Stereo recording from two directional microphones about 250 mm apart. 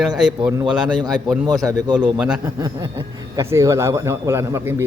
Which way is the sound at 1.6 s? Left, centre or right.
Centre.